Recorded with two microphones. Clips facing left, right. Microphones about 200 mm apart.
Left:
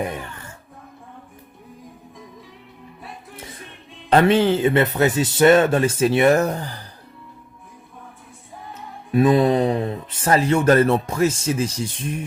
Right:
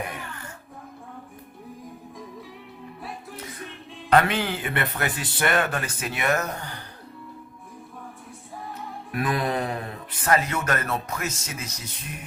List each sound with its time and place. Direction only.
0.1 s music: 25° left (ahead or behind)
4.1 s speech: 25° left (ahead or behind)
9.1 s speech: 25° left (ahead or behind)